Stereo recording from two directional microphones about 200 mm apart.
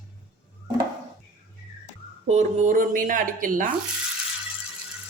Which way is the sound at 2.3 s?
35° right (ahead or behind).